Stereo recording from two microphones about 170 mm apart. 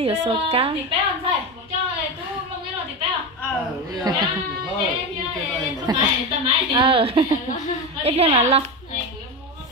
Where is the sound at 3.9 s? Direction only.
25° right (ahead or behind).